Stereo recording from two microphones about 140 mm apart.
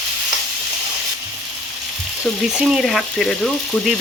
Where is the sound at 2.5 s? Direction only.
5° right (ahead or behind).